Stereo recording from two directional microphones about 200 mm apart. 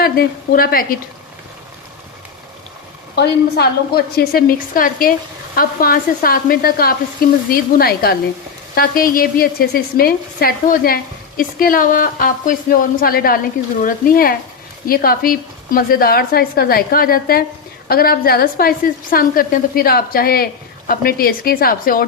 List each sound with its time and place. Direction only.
0.0 s speech: 50° left (ahead or behind)
3.2 s a woman's voice: 55° left (ahead or behind)